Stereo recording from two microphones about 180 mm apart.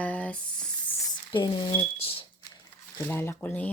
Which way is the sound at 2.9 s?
15° left (ahead or behind).